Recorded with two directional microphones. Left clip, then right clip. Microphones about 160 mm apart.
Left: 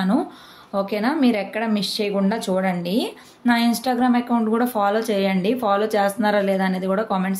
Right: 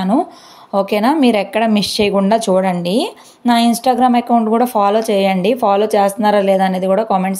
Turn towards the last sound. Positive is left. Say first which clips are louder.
# right 8 dB
turn(degrees=-35)  # may be behind; listen again after turning